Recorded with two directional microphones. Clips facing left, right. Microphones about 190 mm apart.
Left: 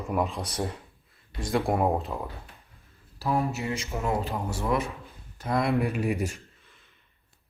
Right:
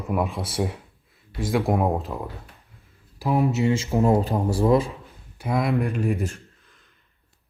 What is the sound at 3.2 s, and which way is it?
Speech, 15° right (ahead or behind).